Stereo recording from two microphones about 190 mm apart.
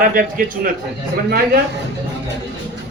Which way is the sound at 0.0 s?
45° right (ahead or behind).